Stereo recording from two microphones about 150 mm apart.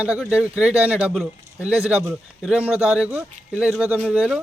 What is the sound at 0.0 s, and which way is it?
Speech, 5° right (ahead or behind).